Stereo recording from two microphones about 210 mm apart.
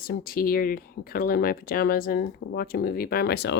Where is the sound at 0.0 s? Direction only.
45° left (ahead or behind).